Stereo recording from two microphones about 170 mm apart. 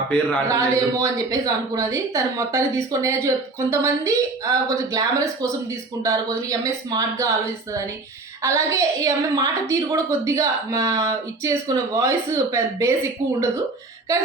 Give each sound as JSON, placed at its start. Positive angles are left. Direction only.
{"t": 0.1, "sound": "speech", "side_deg": 10}
{"t": 0.4, "sound": "a woman's voice", "side_deg": -20}
{"t": 8.4, "sound": "a woman's voice", "side_deg": -15}